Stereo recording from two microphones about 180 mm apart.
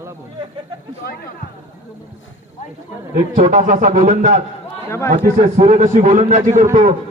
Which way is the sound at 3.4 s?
45° right (ahead or behind).